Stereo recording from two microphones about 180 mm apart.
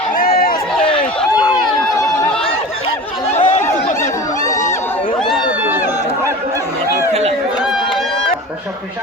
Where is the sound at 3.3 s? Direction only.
40° left (ahead or behind).